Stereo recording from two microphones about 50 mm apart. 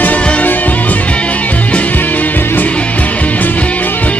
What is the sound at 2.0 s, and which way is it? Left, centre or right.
Music, left.